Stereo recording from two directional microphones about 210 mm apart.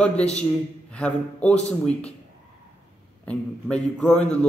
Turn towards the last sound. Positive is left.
turn(degrees=5)  # may be behind; listen again after turning